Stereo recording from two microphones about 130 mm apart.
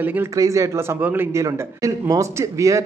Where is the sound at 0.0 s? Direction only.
15° right (ahead or behind).